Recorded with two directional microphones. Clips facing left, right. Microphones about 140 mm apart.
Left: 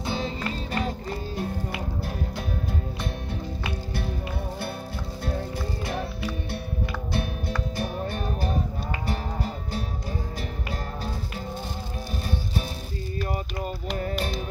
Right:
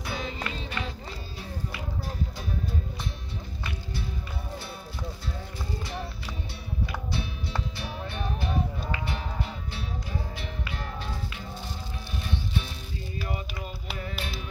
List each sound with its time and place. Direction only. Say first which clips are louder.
0.0 s music: left 5 dB; 30° left (ahead or behind); by 1.8 s 50° left (ahead or behind)
3.6 s music: left 5 dB; 60° left (ahead or behind)
7.1 s music: left 4 dB; 55° left (ahead or behind)